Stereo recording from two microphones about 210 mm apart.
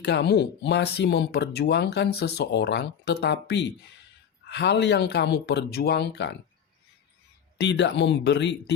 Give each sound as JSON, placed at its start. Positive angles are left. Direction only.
{"t": 0.0, "sound": "speech", "side_deg": 55}
{"t": 7.6, "sound": "speech", "side_deg": 55}